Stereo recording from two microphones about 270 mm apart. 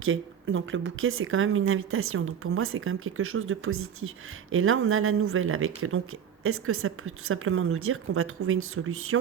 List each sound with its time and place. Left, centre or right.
0.0 s speech: right